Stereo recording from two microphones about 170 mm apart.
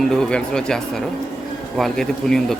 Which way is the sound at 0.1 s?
5° left (ahead or behind).